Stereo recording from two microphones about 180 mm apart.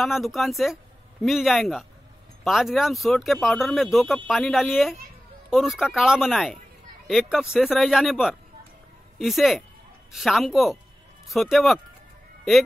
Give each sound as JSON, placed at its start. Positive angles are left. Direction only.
{"t": 0.0, "sound": "speech", "side_deg": 0}